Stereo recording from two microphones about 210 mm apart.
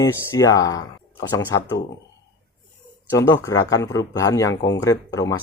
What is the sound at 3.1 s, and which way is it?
Speech, 15° left (ahead or behind).